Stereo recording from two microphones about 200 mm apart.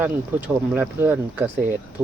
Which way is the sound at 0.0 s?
10° right (ahead or behind).